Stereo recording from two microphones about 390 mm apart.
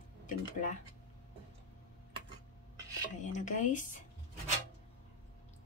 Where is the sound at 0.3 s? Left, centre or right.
Centre.